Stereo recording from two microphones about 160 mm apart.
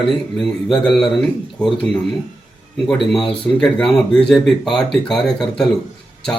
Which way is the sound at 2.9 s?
Centre (ahead or behind).